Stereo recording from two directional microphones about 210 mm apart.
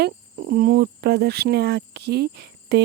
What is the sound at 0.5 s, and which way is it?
Speech, 45° right (ahead or behind).